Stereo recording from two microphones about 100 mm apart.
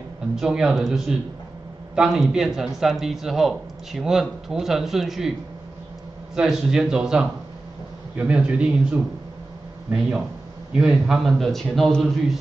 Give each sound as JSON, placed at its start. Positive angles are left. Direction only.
{"t": 0.4, "sound": "speech", "side_deg": -5}
{"t": 6.3, "sound": "speech", "side_deg": -5}
{"t": 10.7, "sound": "speech", "side_deg": -5}